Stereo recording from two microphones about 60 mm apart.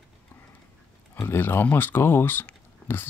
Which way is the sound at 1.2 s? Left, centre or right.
Left.